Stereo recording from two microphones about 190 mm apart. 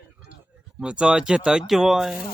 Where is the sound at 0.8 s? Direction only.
5° right (ahead or behind).